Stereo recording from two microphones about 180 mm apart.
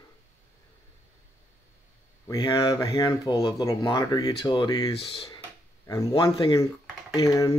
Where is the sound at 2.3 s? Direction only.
20° left (ahead or behind).